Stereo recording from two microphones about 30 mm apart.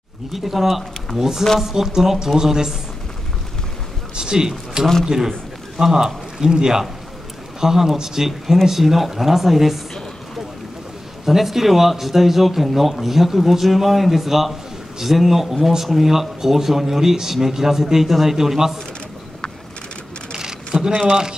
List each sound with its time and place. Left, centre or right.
0.3 s speech: centre
1.1 s speech: centre
4.1 s a sound: right
5.0 s speech: centre
11.2 s speech: centre
20.3 s a sound: right
21.1 s speech: right